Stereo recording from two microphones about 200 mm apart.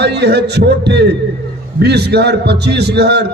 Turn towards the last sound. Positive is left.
turn(degrees=-55)  # may be behind; listen again after turning